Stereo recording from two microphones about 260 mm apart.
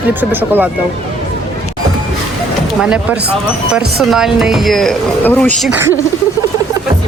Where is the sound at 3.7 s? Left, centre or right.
Centre.